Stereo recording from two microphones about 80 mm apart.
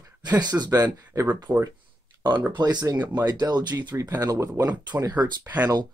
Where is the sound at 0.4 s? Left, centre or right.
Right.